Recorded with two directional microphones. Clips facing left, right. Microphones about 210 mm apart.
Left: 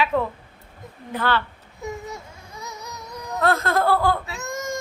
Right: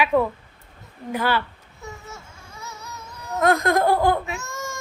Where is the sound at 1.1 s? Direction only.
10° right (ahead or behind).